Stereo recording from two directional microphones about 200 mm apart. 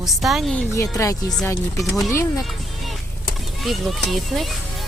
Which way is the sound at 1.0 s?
15° left (ahead or behind).